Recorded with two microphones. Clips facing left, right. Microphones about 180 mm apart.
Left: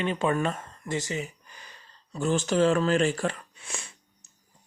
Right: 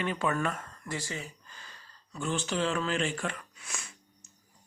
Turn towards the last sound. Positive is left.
turn(degrees=25)  # may be behind; listen again after turning